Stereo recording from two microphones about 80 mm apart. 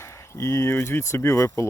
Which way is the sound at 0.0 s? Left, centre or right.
Left.